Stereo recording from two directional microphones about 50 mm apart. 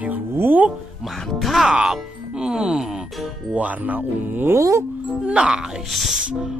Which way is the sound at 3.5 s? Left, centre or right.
Right.